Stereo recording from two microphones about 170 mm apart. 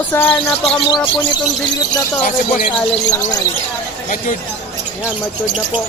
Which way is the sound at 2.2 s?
50° left (ahead or behind).